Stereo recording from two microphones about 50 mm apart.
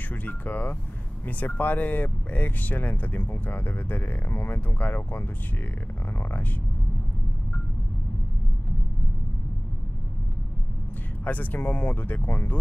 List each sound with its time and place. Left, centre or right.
0.1 s speech: left
11.2 s speech: left